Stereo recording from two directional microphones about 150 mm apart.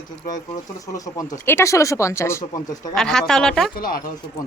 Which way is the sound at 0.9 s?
25° left (ahead or behind).